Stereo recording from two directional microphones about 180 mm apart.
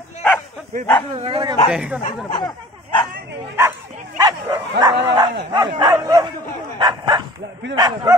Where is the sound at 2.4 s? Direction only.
25° left (ahead or behind).